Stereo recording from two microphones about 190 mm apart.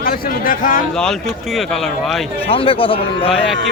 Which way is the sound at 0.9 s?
Centre (ahead or behind).